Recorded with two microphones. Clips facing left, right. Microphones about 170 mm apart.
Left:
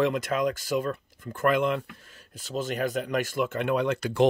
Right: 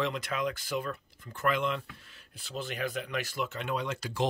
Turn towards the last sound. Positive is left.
turn(degrees=60)  # may be behind; listen again after turning